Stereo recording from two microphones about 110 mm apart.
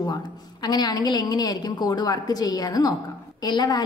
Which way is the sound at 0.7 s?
35° left (ahead or behind).